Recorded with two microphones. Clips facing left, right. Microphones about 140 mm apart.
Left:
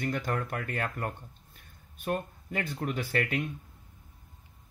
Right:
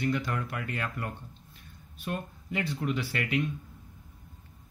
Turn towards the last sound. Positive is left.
turn(degrees=45)  # may be behind; listen again after turning